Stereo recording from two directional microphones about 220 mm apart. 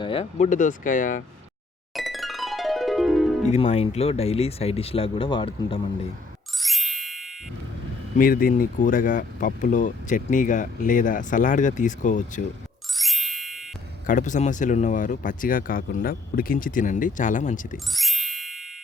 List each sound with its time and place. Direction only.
0.0 s speech: 25° left (ahead or behind)
1.9 s music: centre (ahead or behind)
3.5 s speech: 30° left (ahead or behind)
6.6 s ding: centre (ahead or behind)
8.2 s speech: 40° left (ahead or behind)
13.0 s ding: centre (ahead or behind)
14.1 s speech: 35° left (ahead or behind)
17.9 s music: centre (ahead or behind)